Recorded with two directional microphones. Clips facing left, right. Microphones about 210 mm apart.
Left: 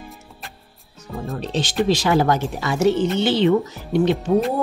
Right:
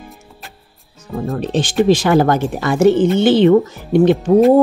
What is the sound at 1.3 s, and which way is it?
Speech, 50° right (ahead or behind).